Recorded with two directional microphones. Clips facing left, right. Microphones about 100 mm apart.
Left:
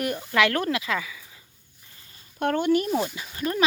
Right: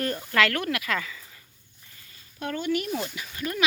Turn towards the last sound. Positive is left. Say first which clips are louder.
# left 4 dB
turn(degrees=30)  # may be behind; listen again after turning